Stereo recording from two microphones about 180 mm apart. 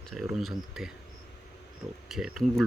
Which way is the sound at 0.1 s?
5° right (ahead or behind).